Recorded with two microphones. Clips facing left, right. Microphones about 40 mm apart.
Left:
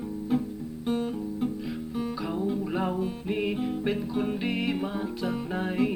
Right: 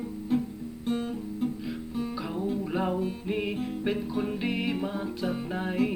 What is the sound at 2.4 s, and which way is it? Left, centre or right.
Music, centre.